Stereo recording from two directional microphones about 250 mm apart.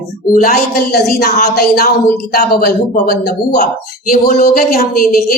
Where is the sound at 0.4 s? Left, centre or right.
Left.